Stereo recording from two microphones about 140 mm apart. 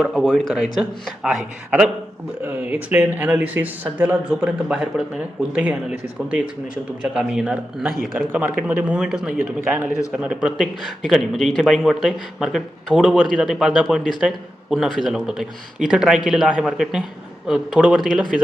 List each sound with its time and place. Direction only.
0.0 s a man's voice: 5° right (ahead or behind)
8.3 s a man's voice: 15° right (ahead or behind)